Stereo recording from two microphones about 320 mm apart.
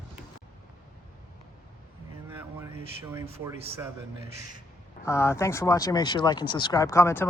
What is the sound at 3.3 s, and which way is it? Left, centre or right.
Speech, centre.